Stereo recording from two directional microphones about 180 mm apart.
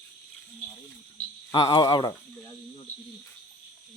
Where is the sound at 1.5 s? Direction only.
25° left (ahead or behind).